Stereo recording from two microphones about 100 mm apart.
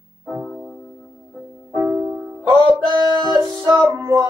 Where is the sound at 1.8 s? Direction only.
30° right (ahead or behind).